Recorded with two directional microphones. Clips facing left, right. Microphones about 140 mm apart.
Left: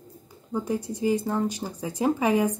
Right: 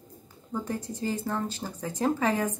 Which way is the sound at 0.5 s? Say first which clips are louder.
Left 4 dB; 10° left (ahead or behind).